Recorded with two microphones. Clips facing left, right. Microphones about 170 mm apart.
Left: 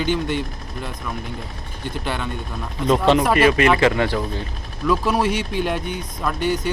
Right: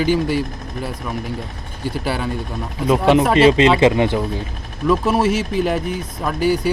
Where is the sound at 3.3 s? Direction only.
25° right (ahead or behind).